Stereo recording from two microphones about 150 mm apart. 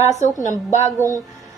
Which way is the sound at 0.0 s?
50° left (ahead or behind).